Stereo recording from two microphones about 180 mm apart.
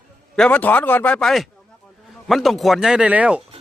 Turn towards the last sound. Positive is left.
turn(degrees=-5)  # may be behind; listen again after turning